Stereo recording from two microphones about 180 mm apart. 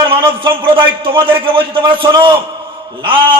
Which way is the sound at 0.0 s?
25° right (ahead or behind).